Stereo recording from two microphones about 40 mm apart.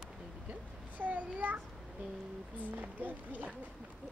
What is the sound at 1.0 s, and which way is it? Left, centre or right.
Speech, right.